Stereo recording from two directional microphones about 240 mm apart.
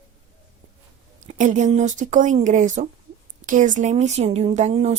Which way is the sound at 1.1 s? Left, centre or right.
Right.